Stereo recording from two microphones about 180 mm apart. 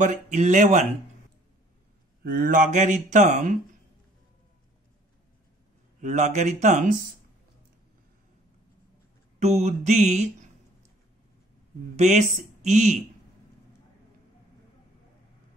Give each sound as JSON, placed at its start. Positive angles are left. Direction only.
{"t": 0.0, "sound": "speech", "side_deg": -40}
{"t": 2.2, "sound": "speech", "side_deg": -50}
{"t": 5.9, "sound": "mantra", "side_deg": -40}
{"t": 9.4, "sound": "mantra", "side_deg": -40}
{"t": 12.0, "sound": "mantra", "side_deg": -40}